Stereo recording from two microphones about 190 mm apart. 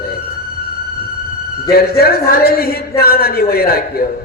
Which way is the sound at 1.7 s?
55° left (ahead or behind).